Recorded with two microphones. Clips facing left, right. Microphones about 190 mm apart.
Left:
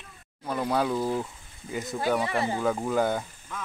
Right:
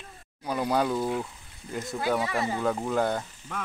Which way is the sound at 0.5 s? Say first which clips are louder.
Even; centre (ahead or behind).